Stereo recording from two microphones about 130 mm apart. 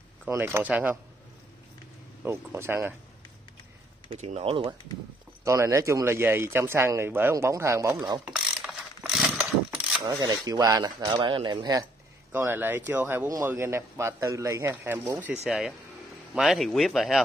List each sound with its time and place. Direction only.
0.3 s speech: 15° right (ahead or behind)
2.2 s speech: 20° right (ahead or behind)
4.1 s speech: 55° right (ahead or behind)
5.4 s speech: 20° right (ahead or behind)
8.3 s mechanisms: 5° right (ahead or behind)
10.0 s speech: 30° right (ahead or behind)
12.3 s speech: 15° right (ahead or behind)
15.4 s speech: 5° right (ahead or behind)